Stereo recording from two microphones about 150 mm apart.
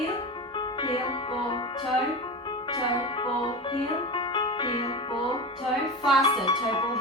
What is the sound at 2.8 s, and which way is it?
Music, 40° left (ahead or behind).